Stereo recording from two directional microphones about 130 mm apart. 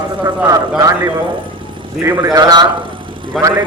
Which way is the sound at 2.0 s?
25° right (ahead or behind).